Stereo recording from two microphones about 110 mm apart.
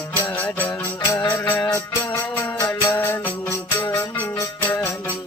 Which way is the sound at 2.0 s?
20° left (ahead or behind).